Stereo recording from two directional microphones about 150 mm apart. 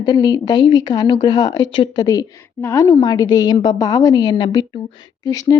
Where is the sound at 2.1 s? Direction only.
20° left (ahead or behind).